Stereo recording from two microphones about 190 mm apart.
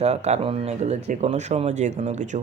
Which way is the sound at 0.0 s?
35° right (ahead or behind).